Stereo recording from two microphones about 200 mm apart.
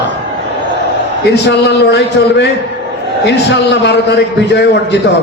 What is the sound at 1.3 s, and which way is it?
A man's voice, 55° left (ahead or behind).